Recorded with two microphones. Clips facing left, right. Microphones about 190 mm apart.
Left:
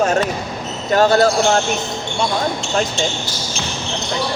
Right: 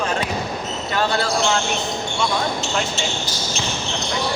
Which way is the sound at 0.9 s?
45° left (ahead or behind).